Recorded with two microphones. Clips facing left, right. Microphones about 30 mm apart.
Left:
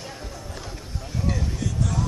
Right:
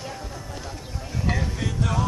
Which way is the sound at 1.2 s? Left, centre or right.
Right.